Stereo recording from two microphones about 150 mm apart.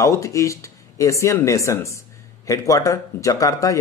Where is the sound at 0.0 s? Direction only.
20° left (ahead or behind).